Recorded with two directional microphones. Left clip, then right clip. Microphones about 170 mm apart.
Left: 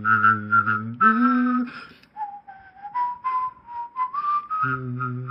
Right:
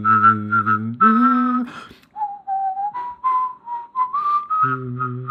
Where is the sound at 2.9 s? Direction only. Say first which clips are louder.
Right 4 dB; 50° right (ahead or behind).